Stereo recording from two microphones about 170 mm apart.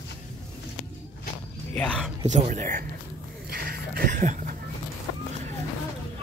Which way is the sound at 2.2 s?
45° right (ahead or behind).